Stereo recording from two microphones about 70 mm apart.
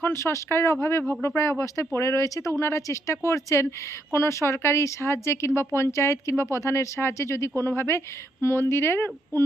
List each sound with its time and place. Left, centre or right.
0.0 s speech: left